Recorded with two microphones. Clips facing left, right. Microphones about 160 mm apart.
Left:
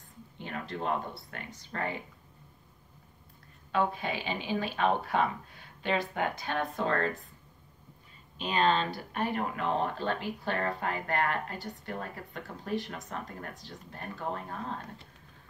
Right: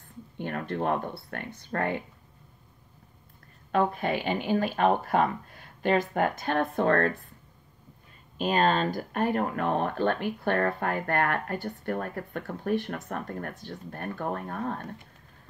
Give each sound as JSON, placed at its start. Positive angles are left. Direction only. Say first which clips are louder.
{"t": 0.4, "sound": "a sound", "louder": "right 7 dB", "side_deg": -55}
{"t": 0.8, "sound": "speech", "louder": "right 2 dB", "side_deg": -60}
{"t": 3.7, "sound": "speech", "louder": "right 4 dB", "side_deg": -50}
{"t": 8.4, "sound": "speech", "louder": "right 3 dB", "side_deg": -45}